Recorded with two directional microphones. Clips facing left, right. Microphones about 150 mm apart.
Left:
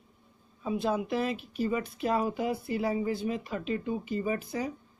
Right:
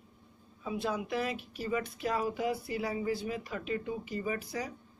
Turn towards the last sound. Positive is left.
turn(degrees=25)  # may be behind; listen again after turning